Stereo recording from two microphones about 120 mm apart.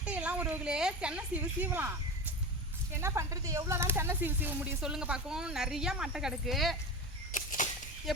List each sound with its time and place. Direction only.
0.0 s speech: 10° right (ahead or behind)
4.8 s speech: 5° right (ahead or behind)
7.3 s a sound: 90° left